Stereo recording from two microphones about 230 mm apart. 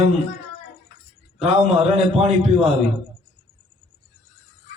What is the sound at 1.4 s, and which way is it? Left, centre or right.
A man's voice, right.